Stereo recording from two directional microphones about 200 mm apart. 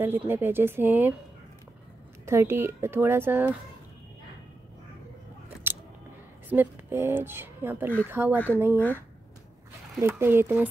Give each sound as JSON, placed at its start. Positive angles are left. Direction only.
{"t": 0.0, "sound": "speech", "side_deg": -10}
{"t": 2.2, "sound": "speech", "side_deg": -15}
{"t": 6.5, "sound": "a woman's voice", "side_deg": -10}
{"t": 8.7, "sound": "speech", "side_deg": 10}
{"t": 9.9, "sound": "speech", "side_deg": -10}